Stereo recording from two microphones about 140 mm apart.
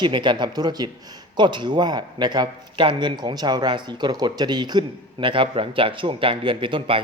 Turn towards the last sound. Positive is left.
turn(degrees=-40)  # may be behind; listen again after turning